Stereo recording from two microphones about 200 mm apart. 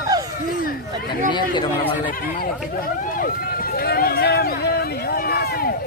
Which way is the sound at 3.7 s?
50° left (ahead or behind).